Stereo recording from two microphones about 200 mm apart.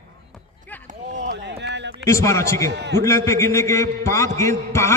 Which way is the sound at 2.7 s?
60° right (ahead or behind).